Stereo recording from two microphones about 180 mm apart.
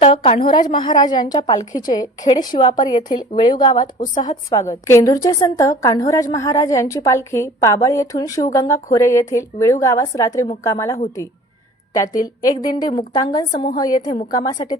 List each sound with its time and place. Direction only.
0.0 s a woman's voice: 30° left (ahead or behind); by 11.0 s 15° left (ahead or behind)
12.1 s a woman's voice: 20° left (ahead or behind)